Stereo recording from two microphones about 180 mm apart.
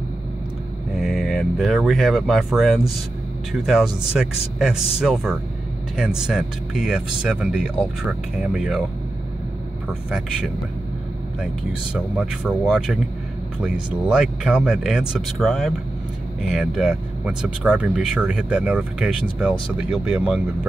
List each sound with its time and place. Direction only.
0.9 s speech: centre (ahead or behind)
12.2 s speech: 5° right (ahead or behind)